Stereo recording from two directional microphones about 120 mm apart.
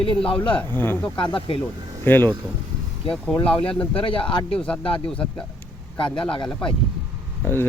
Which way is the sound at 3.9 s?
45° left (ahead or behind).